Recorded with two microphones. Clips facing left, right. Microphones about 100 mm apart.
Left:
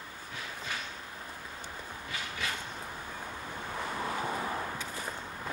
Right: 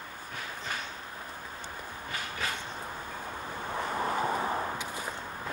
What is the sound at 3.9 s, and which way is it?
Vehicle, 40° right (ahead or behind).